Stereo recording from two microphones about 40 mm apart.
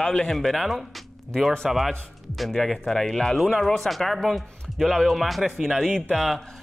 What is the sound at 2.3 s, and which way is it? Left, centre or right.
Speech, centre.